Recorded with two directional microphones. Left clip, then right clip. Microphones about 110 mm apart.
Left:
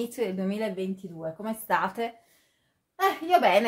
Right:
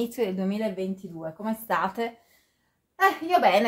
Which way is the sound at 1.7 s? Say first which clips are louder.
Even; 10° right (ahead or behind).